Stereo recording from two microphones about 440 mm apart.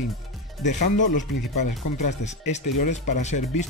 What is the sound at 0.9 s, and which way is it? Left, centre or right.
Speech, left.